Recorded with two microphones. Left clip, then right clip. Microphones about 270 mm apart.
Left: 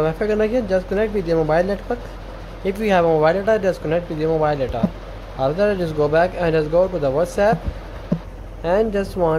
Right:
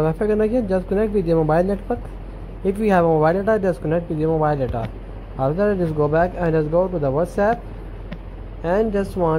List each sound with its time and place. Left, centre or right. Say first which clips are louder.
0.0 s speech: even; centre
8.6 s speech: left 1 dB; centre